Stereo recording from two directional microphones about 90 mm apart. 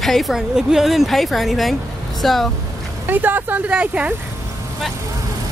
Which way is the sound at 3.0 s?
20° right (ahead or behind).